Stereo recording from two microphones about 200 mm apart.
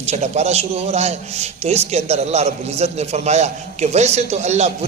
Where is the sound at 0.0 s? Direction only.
35° right (ahead or behind).